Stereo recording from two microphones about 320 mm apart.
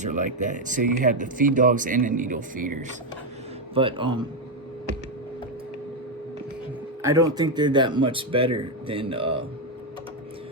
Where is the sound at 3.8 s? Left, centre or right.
Centre.